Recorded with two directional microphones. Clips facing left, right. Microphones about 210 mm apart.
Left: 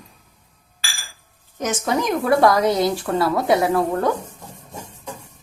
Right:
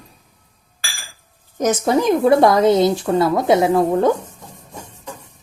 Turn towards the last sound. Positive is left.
turn(degrees=-20)  # may be behind; listen again after turning